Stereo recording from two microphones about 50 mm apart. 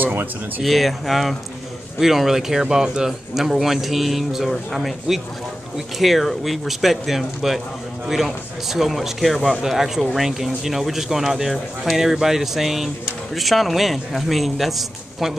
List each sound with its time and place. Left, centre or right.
0.0 s speech: right
0.7 s speech: centre
5.9 s speech: centre